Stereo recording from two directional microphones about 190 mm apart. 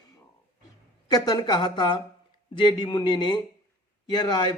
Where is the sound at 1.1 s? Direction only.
20° left (ahead or behind).